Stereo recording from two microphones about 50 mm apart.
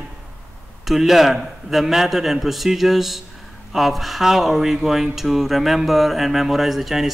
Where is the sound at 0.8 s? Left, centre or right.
Centre.